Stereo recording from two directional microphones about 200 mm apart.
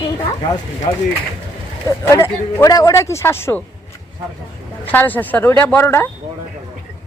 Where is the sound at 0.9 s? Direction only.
20° left (ahead or behind).